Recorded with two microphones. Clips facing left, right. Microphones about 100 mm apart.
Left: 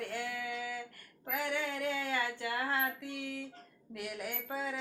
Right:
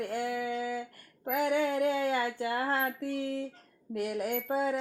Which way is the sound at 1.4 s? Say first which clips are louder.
Right 9 dB; 45° right (ahead or behind).